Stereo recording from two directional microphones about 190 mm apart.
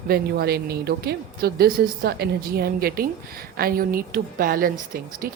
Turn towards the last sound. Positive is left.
turn(degrees=-45)  # may be behind; listen again after turning